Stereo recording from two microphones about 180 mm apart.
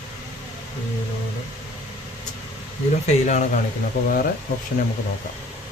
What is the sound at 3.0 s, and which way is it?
Speech, 40° left (ahead or behind).